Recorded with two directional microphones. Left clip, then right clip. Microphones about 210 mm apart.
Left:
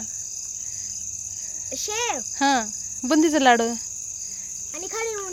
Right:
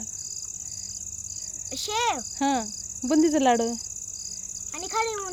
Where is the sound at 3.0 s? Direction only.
Centre (ahead or behind).